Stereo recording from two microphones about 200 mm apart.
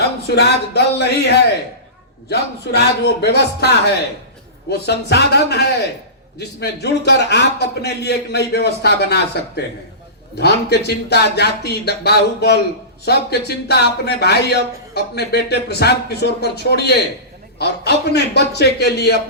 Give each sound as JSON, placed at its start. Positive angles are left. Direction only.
{"t": 0.3, "sound": "speech", "side_deg": 55}
{"t": 10.3, "sound": "speech", "side_deg": 55}
{"t": 13.7, "sound": "speech", "side_deg": 55}